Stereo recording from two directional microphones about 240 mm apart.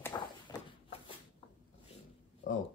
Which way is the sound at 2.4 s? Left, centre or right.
Left.